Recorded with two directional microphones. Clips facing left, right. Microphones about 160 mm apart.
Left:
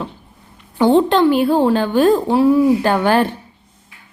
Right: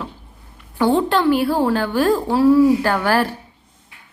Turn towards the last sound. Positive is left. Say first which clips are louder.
# left 3 dB
turn(degrees=20)  # may be behind; listen again after turning